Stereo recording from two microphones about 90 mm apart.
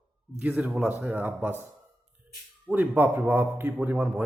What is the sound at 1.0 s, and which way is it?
Speech, 20° right (ahead or behind).